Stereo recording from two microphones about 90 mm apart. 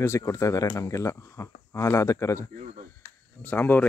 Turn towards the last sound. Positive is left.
turn(degrees=20)  # may be behind; listen again after turning